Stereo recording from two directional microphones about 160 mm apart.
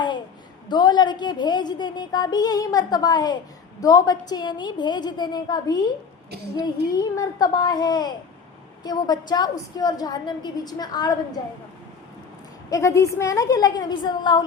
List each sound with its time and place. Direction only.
0.7 s a woman's voice: 30° left (ahead or behind)
6.9 s a woman's voice: 20° left (ahead or behind)
12.7 s a woman's voice: 20° left (ahead or behind)